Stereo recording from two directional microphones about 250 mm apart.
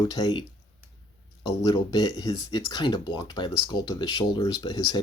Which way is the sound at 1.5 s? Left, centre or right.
Centre.